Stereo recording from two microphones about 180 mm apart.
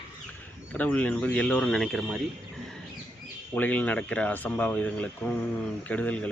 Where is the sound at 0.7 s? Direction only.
10° left (ahead or behind).